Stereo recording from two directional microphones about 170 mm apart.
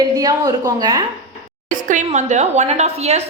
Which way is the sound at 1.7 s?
50° right (ahead or behind).